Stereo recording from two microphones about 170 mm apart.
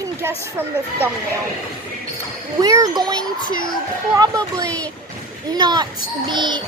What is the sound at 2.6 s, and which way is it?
A child's voice, 20° right (ahead or behind).